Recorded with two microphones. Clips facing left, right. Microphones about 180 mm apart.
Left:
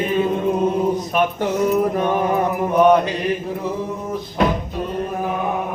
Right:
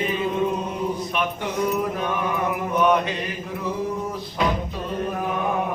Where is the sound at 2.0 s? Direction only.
35° left (ahead or behind).